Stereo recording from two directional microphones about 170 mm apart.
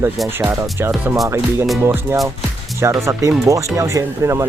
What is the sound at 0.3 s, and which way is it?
Speech, 15° right (ahead or behind).